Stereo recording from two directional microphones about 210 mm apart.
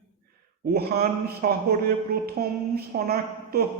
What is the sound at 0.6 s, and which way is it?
A man's voice, 50° right (ahead or behind).